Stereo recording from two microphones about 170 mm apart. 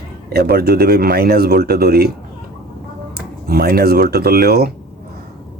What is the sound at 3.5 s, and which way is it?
Speech, 65° right (ahead or behind).